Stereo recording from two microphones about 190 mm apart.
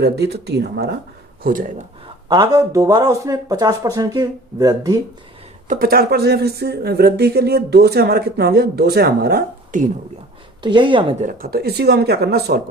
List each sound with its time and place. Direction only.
0.0 s speech: 60° right (ahead or behind)
2.3 s speech: 20° right (ahead or behind)
5.6 s speech: 45° right (ahead or behind)
10.6 s speech: 25° right (ahead or behind)
11.3 s speech: 50° right (ahead or behind)